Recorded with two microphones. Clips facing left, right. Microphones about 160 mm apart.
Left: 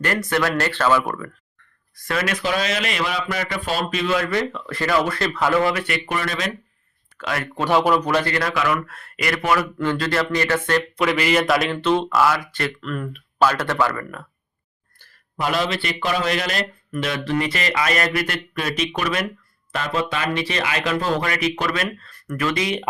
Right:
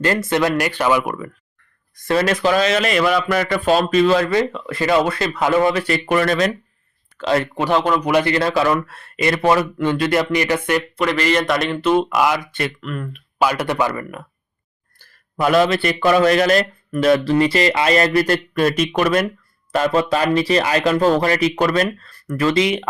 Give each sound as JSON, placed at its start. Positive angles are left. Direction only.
{"t": 0.0, "sound": "speech", "side_deg": -25}
{"t": 2.0, "sound": "speech", "side_deg": -30}
{"t": 2.3, "sound": "a man's voice", "side_deg": -45}
{"t": 4.2, "sound": "speech", "side_deg": -20}
{"t": 6.1, "sound": "a man's voice", "side_deg": -50}
{"t": 7.2, "sound": "speech", "side_deg": -30}
{"t": 7.7, "sound": "speech", "side_deg": 10}
{"t": 8.0, "sound": "speech", "side_deg": -15}
{"t": 10.9, "sound": "speech", "side_deg": 5}
{"t": 12.8, "sound": "speech", "side_deg": 0}
{"t": 13.4, "sound": "speech", "side_deg": -15}
{"t": 15.4, "sound": "a man's voice", "side_deg": -50}